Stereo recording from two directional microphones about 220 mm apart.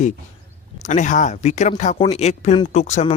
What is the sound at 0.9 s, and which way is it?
Speech, 35° left (ahead or behind).